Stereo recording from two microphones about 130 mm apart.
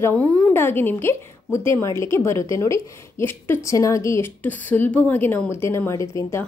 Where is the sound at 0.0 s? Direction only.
15° left (ahead or behind).